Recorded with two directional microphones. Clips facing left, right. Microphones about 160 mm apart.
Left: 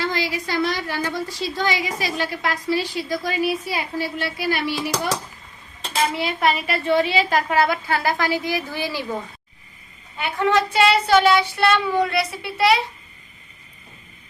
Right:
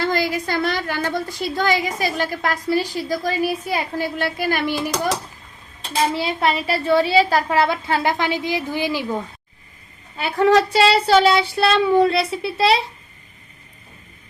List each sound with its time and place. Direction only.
0.0 s a woman's voice: 50° right (ahead or behind)
6.1 s a woman's voice: 30° right (ahead or behind)
10.2 s a woman's voice: 35° right (ahead or behind)